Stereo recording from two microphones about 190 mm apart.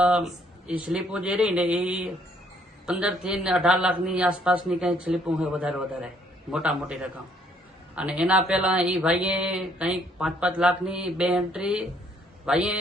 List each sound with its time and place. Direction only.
0.0 s speech: 5° right (ahead or behind)